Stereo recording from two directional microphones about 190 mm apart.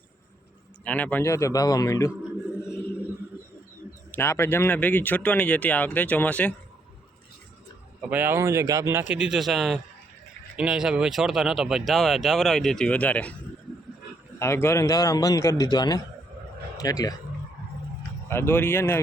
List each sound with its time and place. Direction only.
0.9 s speech: 10° left (ahead or behind)
2.6 s a sound: 5° right (ahead or behind)
4.1 s speech: 15° left (ahead or behind)
8.1 s a man's voice: 10° right (ahead or behind); by 13.3 s 5° left (ahead or behind)
14.3 s speech: 15° left (ahead or behind)
18.3 s speech: 10° left (ahead or behind)